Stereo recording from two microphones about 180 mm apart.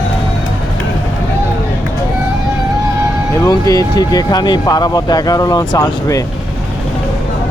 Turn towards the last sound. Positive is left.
turn(degrees=20)  # may be behind; listen again after turning